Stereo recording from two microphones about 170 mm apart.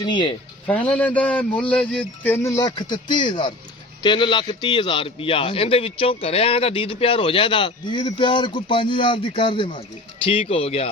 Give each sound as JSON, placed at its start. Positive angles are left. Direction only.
{"t": 0.0, "sound": "a man's voice", "side_deg": 25}
{"t": 0.7, "sound": "a man's voice", "side_deg": 10}